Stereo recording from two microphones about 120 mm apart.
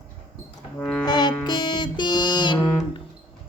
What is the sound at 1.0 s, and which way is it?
Music, 35° left (ahead or behind).